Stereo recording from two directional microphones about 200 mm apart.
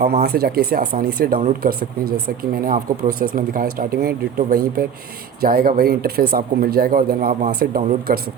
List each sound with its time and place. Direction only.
0.0 s speech: 55° right (ahead or behind)
2.4 s speech: 45° right (ahead or behind)